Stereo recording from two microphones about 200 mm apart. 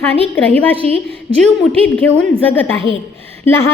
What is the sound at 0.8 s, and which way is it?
Speech, 30° right (ahead or behind).